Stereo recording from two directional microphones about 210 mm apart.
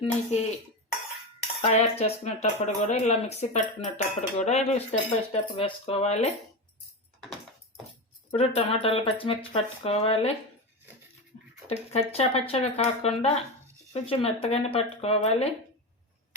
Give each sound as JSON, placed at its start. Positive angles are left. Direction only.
{"t": 1.6, "sound": "speech", "side_deg": 30}
{"t": 8.3, "sound": "speech", "side_deg": 25}
{"t": 11.3, "sound": "a sound", "side_deg": 30}
{"t": 11.7, "sound": "speech", "side_deg": 30}